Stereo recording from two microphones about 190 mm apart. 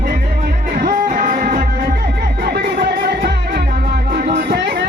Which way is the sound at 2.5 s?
55° right (ahead or behind).